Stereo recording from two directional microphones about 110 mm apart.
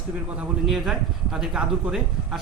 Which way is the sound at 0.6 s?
Centre (ahead or behind).